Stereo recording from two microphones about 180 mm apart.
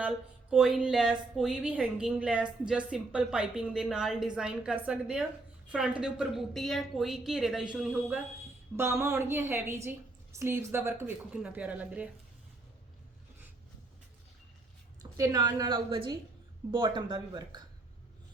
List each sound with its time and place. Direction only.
0.5 s a woman's voice: 5° right (ahead or behind)
15.2 s a woman's voice: 20° right (ahead or behind)